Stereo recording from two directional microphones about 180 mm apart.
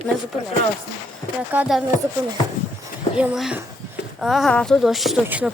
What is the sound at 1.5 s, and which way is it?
Speech, 5° right (ahead or behind).